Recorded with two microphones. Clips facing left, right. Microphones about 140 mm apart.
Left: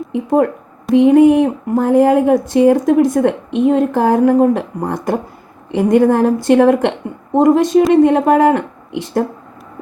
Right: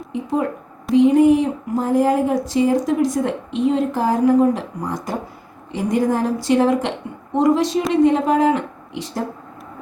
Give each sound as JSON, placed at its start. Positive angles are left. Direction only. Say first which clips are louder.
{"t": 0.1, "sound": "a woman's voice", "louder": "left 7 dB", "side_deg": 55}